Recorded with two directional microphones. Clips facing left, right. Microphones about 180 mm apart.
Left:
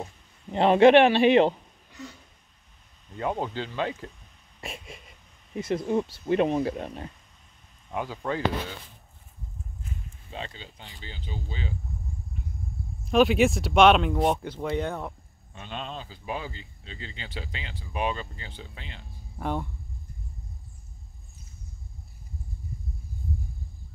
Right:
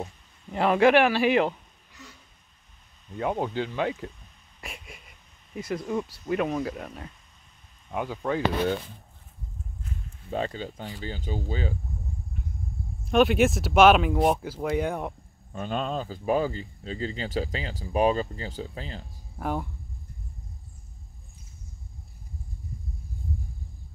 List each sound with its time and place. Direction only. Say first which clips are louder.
0.5 s speech: left 3 dB; 25° left (ahead or behind)
3.2 s speech: right 2 dB; 10° right (ahead or behind)
4.6 s a sound: left 3 dB; 25° left (ahead or behind)
5.6 s speech: left 3 dB; 25° left (ahead or behind)
8.2 s speech: right 3 dB; centre (ahead or behind)
10.3 s speech: right 9 dB; 45° right (ahead or behind)
13.0 s speech: even; centre (ahead or behind)
15.5 s speech: right 8 dB; 45° right (ahead or behind)
19.3 s speech: even; 5° right (ahead or behind)